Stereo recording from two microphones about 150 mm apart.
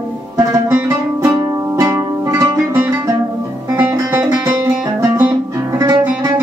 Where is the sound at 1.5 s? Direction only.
20° right (ahead or behind).